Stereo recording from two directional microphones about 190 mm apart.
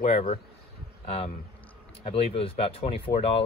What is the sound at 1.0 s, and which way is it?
Speech, 35° left (ahead or behind).